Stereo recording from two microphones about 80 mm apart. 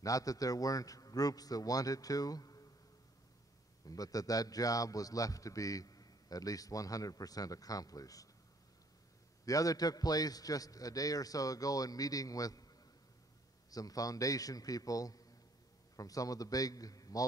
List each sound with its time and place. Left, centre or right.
0.0 s a man's voice: left
3.8 s a man's voice: left
9.5 s a man's voice: left
13.7 s a man's voice: left